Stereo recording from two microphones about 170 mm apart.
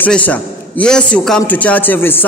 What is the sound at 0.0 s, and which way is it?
A man's voice, 10° left (ahead or behind).